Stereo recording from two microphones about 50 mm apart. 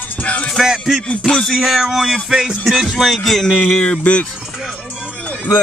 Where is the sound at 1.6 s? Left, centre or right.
Centre.